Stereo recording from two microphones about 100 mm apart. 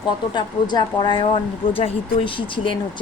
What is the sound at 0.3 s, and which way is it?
Speech, 50° left (ahead or behind).